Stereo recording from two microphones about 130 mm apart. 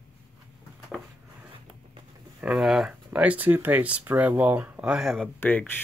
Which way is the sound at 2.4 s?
5° right (ahead or behind).